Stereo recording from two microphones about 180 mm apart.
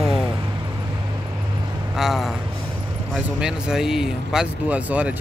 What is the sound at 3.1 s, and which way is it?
Speech, 5° right (ahead or behind).